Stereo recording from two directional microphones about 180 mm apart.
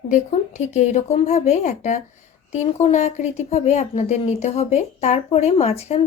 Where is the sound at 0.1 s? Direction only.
45° left (ahead or behind).